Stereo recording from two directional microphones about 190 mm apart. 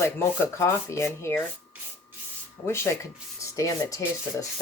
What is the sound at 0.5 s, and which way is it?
Speech, 15° left (ahead or behind).